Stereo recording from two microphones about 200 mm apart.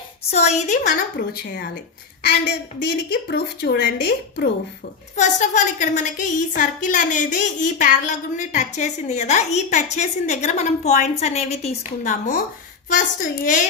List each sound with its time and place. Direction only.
0.3 s a woman's voice: 35° left (ahead or behind)
1.3 s a woman's voice: 50° left (ahead or behind)
2.8 s a woman's voice: 55° left (ahead or behind)
5.1 s a woman's voice: 35° left (ahead or behind)